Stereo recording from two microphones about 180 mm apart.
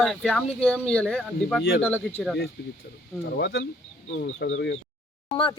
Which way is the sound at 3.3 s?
85° left.